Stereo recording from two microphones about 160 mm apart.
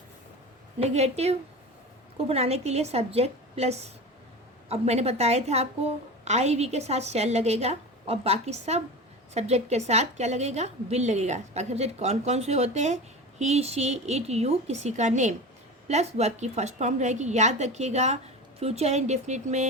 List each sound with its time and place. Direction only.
0.8 s a woman's voice: 40° right (ahead or behind)